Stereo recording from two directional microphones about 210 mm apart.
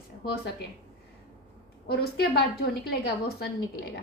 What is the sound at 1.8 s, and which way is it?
A woman's voice, 50° left (ahead or behind).